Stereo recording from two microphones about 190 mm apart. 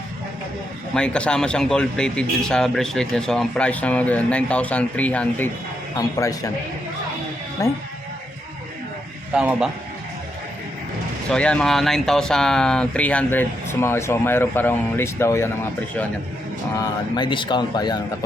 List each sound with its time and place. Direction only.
0.9 s speech: 5° left (ahead or behind)
6.0 s speech: 15° left (ahead or behind)
7.6 s speech: 15° left (ahead or behind)
9.3 s speech: 5° right (ahead or behind)
11.3 s speech: 5° left (ahead or behind)
16.8 s speech: 25° left (ahead or behind)